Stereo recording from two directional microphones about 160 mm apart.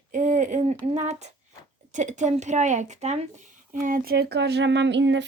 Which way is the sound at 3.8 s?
60° right (ahead or behind).